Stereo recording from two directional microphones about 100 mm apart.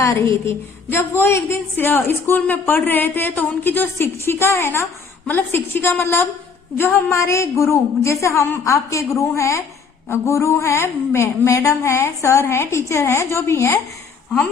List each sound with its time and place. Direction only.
0.0 s a woman's voice: 30° left (ahead or behind)